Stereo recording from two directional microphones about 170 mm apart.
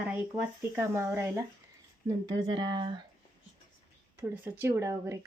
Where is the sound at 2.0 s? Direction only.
25° right (ahead or behind).